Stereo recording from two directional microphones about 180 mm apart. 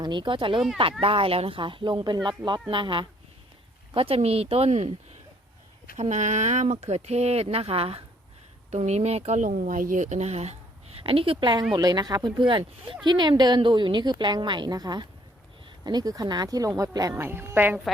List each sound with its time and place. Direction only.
0.0 s speech: 25° right (ahead or behind)
6.0 s speech: 40° right (ahead or behind); by 17.7 s 10° right (ahead or behind)